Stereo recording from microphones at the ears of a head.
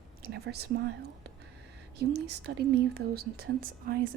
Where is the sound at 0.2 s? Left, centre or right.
Right.